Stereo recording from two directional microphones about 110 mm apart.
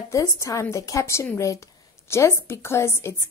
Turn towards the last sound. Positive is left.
turn(degrees=25)  # may be behind; listen again after turning